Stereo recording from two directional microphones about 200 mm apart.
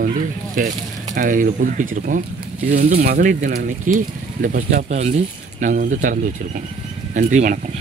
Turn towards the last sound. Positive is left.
turn(degrees=-40)  # may be behind; listen again after turning